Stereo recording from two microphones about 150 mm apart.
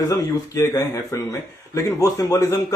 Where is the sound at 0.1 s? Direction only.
20° left (ahead or behind).